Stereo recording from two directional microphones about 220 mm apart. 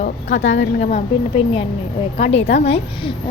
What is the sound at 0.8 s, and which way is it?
A woman's voice, 30° left (ahead or behind).